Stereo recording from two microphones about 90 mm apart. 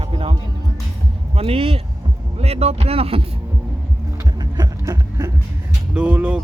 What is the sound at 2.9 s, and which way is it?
Speech, 90° right.